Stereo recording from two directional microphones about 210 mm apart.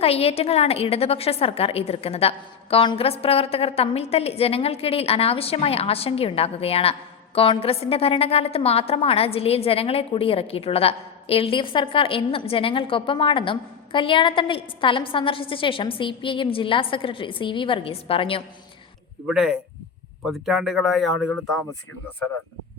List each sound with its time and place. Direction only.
0.0 s a woman's voice: 30° left (ahead or behind)
19.3 s speech: 5° right (ahead or behind)